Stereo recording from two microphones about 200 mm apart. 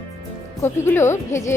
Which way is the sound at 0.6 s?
10° left (ahead or behind).